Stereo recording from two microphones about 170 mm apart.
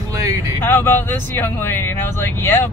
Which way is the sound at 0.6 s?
15° left (ahead or behind).